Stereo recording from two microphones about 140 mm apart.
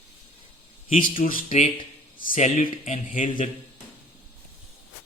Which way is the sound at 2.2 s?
75° left (ahead or behind).